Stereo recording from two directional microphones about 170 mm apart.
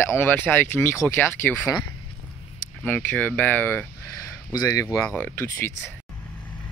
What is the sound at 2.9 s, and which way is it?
Speech, 10° left (ahead or behind).